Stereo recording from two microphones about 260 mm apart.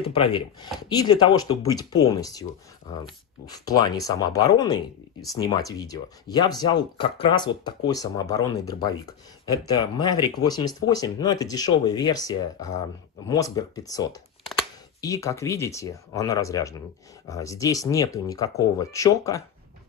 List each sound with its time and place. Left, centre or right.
0.0 s speech: centre
3.4 s speech: centre